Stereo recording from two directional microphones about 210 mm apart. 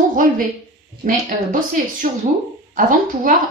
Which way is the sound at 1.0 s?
40° right (ahead or behind).